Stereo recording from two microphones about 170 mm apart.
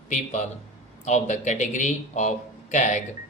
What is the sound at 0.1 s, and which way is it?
Speech, 45° left (ahead or behind).